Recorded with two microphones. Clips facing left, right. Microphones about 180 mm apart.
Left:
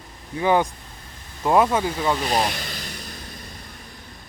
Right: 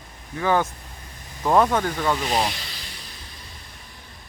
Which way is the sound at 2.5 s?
50° left (ahead or behind).